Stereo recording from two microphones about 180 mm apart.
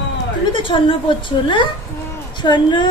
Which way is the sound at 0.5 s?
30° left (ahead or behind).